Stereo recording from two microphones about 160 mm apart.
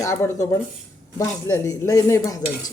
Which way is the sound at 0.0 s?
15° left (ahead or behind).